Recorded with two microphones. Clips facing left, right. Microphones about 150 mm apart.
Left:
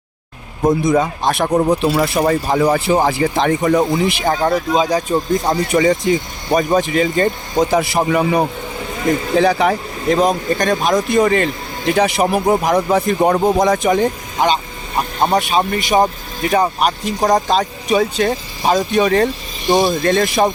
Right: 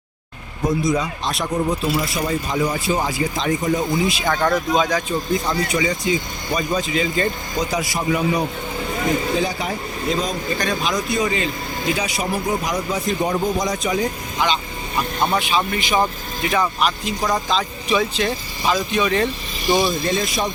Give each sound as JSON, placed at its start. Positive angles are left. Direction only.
{"t": 0.7, "sound": "speech", "side_deg": 55}
{"t": 1.5, "sound": "speech", "side_deg": 65}
{"t": 4.3, "sound": "speech", "side_deg": 30}
{"t": 5.7, "sound": "speech", "side_deg": 50}
{"t": 9.4, "sound": "speech", "side_deg": 70}
{"t": 14.3, "sound": "speech", "side_deg": 45}
{"t": 19.8, "sound": "speech", "side_deg": 60}